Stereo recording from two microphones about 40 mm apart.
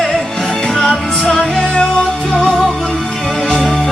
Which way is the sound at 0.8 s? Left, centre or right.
Centre.